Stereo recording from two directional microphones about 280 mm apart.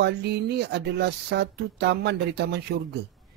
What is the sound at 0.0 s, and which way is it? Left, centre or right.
Speech, right.